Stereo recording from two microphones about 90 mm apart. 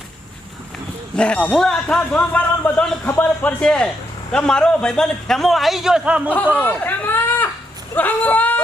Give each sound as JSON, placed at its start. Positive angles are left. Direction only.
{"t": 1.1, "sound": "a man's voice", "side_deg": 10}
{"t": 3.0, "sound": "a man's voice", "side_deg": 20}
{"t": 6.2, "sound": "speech", "side_deg": 20}